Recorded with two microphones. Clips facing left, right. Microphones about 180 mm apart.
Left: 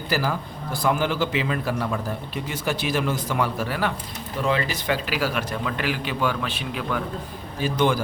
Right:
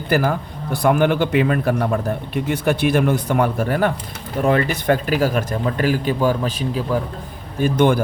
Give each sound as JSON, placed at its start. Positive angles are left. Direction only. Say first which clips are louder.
{"t": 0.1, "sound": "a man's voice", "louder": "right 7 dB", "side_deg": -55}
{"t": 7.6, "sound": "speech", "louder": "right 6 dB", "side_deg": -55}